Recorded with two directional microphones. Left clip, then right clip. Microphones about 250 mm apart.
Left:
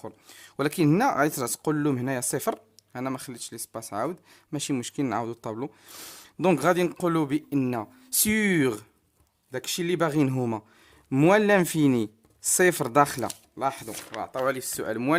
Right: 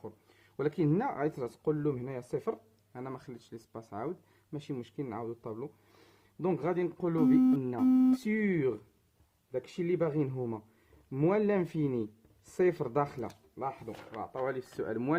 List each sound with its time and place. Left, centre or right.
0.5 s speech: left